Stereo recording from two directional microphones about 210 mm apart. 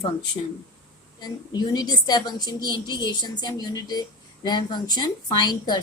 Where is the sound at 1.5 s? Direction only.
20° left (ahead or behind).